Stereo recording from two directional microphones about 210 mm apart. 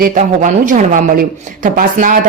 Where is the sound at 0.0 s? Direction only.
35° right (ahead or behind).